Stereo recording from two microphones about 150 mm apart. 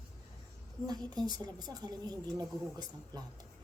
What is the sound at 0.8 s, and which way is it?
Speech, 30° right (ahead or behind).